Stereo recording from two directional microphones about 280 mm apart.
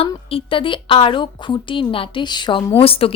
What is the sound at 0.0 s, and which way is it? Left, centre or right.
A woman's voice, centre.